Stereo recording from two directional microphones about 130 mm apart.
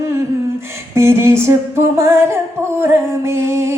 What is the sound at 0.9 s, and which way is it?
Speech, 20° right (ahead or behind).